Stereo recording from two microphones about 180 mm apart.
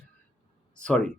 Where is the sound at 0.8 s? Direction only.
5° left (ahead or behind).